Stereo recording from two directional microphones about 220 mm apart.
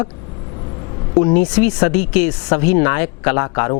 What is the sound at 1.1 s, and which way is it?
Speech, 30° left (ahead or behind).